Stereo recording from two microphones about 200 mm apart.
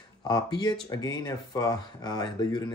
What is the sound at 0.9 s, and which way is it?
Speech, 20° left (ahead or behind).